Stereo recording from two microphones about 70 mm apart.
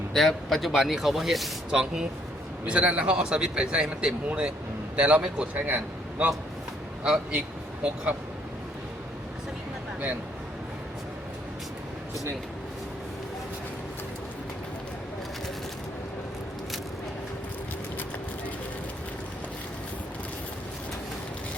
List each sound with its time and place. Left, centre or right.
0.1 s a man's voice: centre